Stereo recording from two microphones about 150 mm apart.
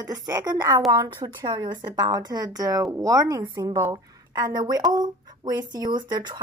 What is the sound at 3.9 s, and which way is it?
Speech, 25° right (ahead or behind).